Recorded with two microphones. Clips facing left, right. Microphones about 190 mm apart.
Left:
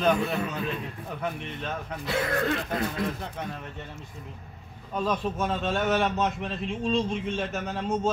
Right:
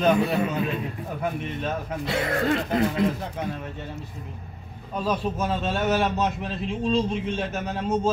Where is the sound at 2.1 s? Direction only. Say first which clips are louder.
Right 2 dB; 30° right (ahead or behind).